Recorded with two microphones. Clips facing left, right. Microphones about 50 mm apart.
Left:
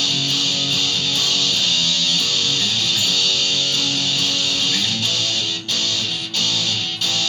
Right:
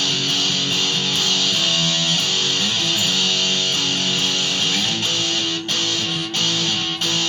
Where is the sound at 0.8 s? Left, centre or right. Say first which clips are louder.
Even; right.